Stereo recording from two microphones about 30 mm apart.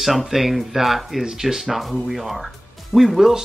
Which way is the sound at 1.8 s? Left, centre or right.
Centre.